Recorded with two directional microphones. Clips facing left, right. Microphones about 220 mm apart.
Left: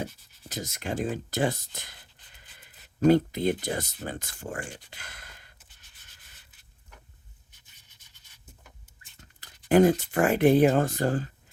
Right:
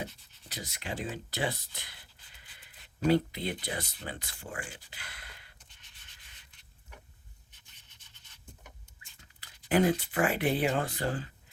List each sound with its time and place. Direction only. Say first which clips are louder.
0.0 s speech: left 5 dB; 45° left (ahead or behind)
3.0 s speech: left 6 dB; 45° left (ahead or behind)
9.2 s speech: left 8 dB; 45° left (ahead or behind)